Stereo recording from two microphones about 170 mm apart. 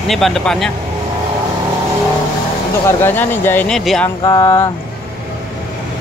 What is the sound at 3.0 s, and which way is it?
Speech, 10° left (ahead or behind).